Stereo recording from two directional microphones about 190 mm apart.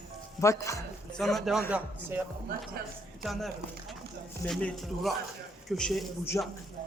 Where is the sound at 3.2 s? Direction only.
Centre (ahead or behind).